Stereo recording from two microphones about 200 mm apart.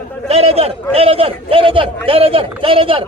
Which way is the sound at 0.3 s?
30° right (ahead or behind).